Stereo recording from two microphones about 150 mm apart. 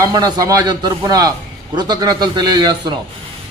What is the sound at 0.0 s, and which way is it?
A man's voice, 25° right (ahead or behind).